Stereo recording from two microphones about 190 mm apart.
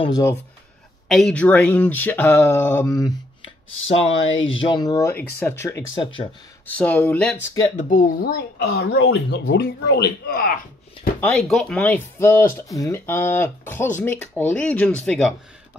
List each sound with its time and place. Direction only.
0.0 s speech: 20° left (ahead or behind)
1.0 s speech: centre (ahead or behind)
3.8 s speech: 30° left (ahead or behind)
4.3 s speech: 90° left
4.6 s speech: 25° left (ahead or behind); by 7.3 s 5° left (ahead or behind)
7.9 s speech: 50° left (ahead or behind)
11.1 s speech: 5° left (ahead or behind)